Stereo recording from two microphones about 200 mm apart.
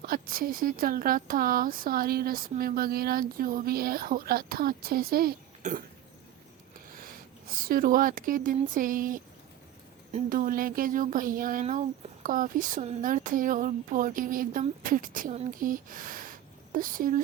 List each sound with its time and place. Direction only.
0.0 s speech: 45° right (ahead or behind)
7.7 s speech: 45° right (ahead or behind)
10.2 s speech: 45° right (ahead or behind)